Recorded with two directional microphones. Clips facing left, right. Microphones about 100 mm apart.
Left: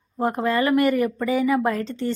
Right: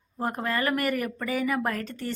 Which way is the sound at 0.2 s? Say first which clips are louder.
Left 7 dB; 25° left (ahead or behind).